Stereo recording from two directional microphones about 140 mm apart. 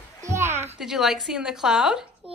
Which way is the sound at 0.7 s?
5° right (ahead or behind).